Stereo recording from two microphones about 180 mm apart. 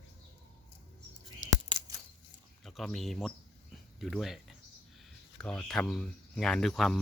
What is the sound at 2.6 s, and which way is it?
Speech, centre (ahead or behind).